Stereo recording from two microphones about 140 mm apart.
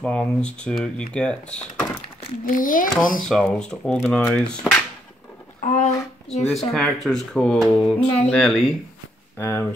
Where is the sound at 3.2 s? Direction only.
5° left (ahead or behind).